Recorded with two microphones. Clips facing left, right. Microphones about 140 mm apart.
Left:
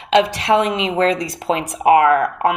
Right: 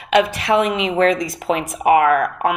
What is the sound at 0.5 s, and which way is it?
Speech, 45° left (ahead or behind).